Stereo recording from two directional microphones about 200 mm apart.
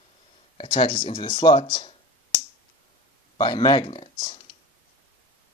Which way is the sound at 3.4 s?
20° left (ahead or behind).